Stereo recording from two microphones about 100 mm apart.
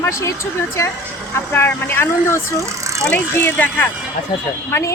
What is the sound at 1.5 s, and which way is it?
A woman's voice, 20° left (ahead or behind).